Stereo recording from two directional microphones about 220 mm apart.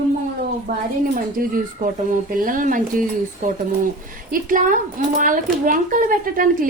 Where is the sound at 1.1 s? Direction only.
40° right (ahead or behind).